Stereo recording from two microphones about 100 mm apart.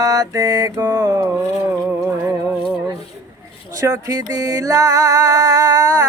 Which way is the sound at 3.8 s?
35° right (ahead or behind).